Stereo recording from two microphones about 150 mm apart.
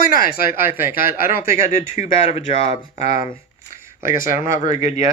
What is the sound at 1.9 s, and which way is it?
Speech, 40° left (ahead or behind).